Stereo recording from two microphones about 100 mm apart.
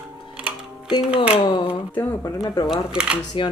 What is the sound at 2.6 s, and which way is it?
Speech, 5° right (ahead or behind).